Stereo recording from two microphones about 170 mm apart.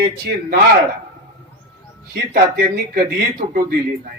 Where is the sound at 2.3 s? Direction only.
60° right (ahead or behind).